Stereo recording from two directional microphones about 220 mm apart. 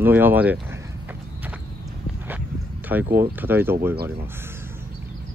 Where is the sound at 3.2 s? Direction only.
10° right (ahead or behind).